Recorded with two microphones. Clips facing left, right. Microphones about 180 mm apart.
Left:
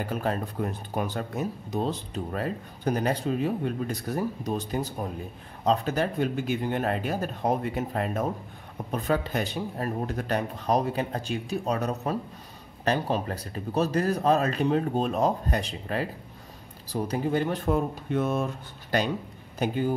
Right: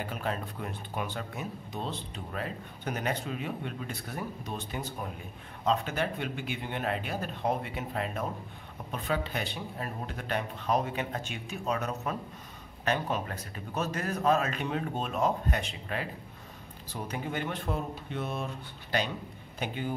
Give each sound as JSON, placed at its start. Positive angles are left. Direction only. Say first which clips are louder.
{"t": 0.0, "sound": "speech", "louder": "left 5 dB", "side_deg": 40}